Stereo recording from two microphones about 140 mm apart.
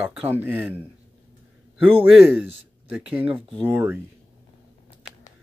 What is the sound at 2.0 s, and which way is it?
Speech, 5° right (ahead or behind).